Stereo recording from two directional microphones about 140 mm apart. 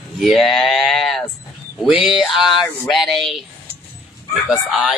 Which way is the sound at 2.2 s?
Centre (ahead or behind).